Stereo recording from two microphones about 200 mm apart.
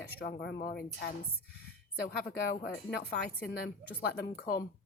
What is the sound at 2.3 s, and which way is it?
Speech, 50° left (ahead or behind).